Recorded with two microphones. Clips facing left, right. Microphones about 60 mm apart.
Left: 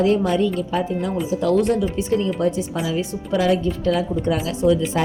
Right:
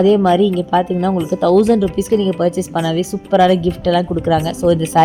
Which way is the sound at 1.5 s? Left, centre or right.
Right.